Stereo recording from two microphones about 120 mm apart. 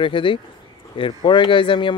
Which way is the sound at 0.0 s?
45° left (ahead or behind).